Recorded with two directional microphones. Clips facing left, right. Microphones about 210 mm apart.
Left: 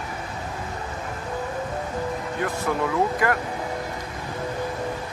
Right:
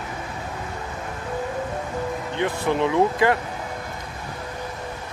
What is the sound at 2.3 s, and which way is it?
Speech, 25° right (ahead or behind).